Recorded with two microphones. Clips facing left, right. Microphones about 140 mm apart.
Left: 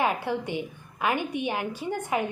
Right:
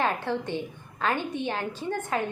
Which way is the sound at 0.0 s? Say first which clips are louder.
Left 1 dB; 10° left (ahead or behind).